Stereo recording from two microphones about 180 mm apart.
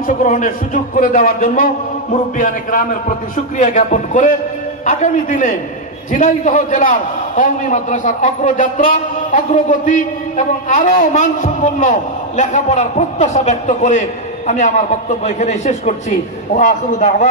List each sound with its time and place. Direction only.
0.0 s a man's voice: 45° left (ahead or behind)